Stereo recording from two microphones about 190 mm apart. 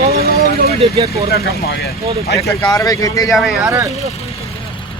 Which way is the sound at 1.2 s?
55° left (ahead or behind).